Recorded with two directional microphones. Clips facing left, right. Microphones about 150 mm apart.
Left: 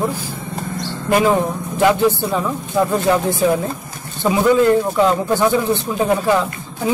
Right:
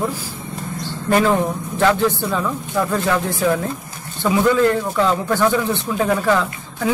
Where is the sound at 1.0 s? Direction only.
15° left (ahead or behind).